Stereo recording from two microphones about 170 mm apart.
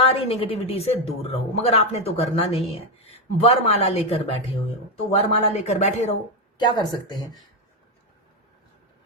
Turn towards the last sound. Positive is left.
turn(degrees=25)  # may be behind; listen again after turning